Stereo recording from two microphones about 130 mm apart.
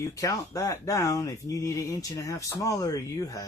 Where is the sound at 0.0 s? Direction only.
25° left (ahead or behind).